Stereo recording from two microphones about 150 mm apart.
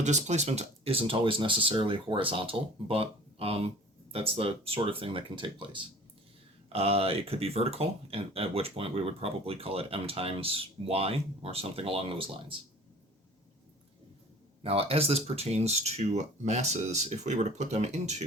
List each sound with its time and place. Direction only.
0.0 s speech: 50° right (ahead or behind)
14.6 s speech: 40° right (ahead or behind)